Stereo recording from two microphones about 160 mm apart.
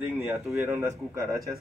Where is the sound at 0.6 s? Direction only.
15° right (ahead or behind).